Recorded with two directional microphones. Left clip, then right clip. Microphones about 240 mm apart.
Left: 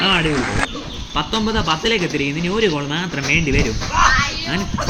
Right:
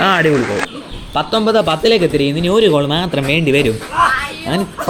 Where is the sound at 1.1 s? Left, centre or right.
Centre.